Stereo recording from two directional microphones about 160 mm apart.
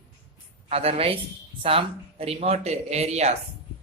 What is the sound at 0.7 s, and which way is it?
Speech, 40° right (ahead or behind).